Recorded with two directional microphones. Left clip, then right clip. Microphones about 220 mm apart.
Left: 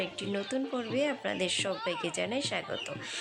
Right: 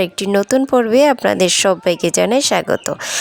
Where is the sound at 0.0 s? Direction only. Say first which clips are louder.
Right 18 dB; 55° right (ahead or behind).